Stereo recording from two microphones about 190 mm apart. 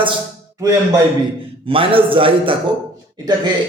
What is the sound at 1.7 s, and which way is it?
Speech, 30° right (ahead or behind).